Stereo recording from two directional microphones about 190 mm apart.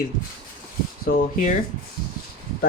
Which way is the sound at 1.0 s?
45° left (ahead or behind).